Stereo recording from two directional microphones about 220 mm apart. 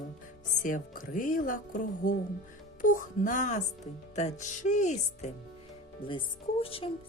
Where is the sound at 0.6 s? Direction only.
35° left (ahead or behind).